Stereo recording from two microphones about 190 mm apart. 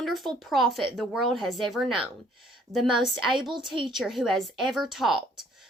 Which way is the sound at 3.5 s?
25° right (ahead or behind).